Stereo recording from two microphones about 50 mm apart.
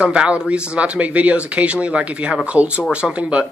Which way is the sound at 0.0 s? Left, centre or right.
Right.